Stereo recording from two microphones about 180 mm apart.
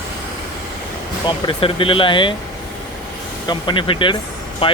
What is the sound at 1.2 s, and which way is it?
Speech, 30° left (ahead or behind).